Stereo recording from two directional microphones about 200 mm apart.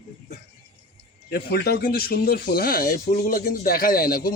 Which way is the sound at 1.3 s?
50° left (ahead or behind).